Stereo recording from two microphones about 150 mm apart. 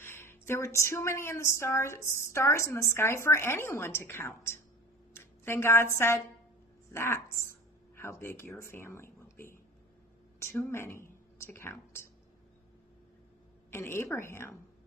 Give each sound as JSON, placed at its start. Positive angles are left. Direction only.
{"t": 0.0, "sound": "a woman's voice", "side_deg": 15}
{"t": 10.7, "sound": "speech", "side_deg": 15}
{"t": 13.7, "sound": "speech", "side_deg": 15}